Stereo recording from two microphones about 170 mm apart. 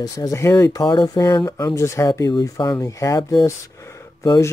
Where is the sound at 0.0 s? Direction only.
20° left (ahead or behind).